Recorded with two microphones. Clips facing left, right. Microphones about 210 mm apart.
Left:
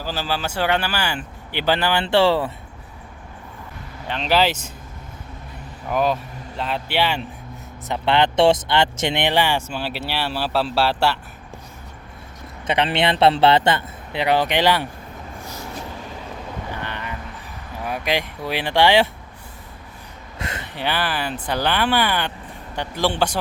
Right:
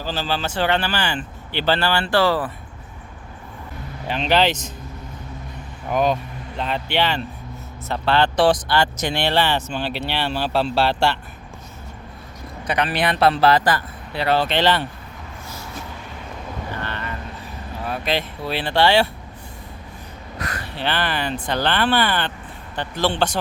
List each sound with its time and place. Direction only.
0.0 s speech: 10° left (ahead or behind); by 2.5 s 25° left (ahead or behind)
4.1 s speech: centre (ahead or behind)
5.9 s speech: 5° left (ahead or behind)
12.6 s a man's voice: 25° left (ahead or behind)
16.7 s vehicle: 15° left (ahead or behind)
17.8 s speech: 15° left (ahead or behind)
20.4 s a sound: 25° left (ahead or behind)
20.7 s speech: 10° left (ahead or behind)